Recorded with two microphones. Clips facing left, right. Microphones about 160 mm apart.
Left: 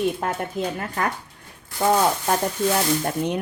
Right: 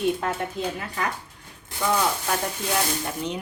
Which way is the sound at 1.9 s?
40° left (ahead or behind).